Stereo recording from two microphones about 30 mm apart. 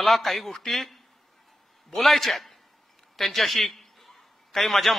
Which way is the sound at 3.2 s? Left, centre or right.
Centre.